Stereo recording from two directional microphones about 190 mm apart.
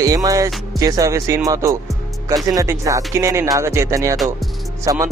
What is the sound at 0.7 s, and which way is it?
Speech, 15° right (ahead or behind).